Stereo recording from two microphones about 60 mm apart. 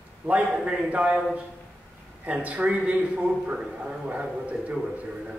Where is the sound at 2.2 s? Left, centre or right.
Right.